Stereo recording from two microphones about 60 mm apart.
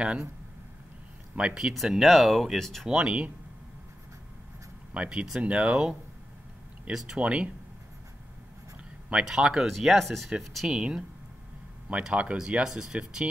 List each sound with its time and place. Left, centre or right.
1.3 s speech: centre
1.6 s speech: centre
2.9 s speech: centre
4.9 s speech: centre
7.2 s speech: centre
9.1 s speech: centre
9.7 s speech: centre
10.8 s speech: centre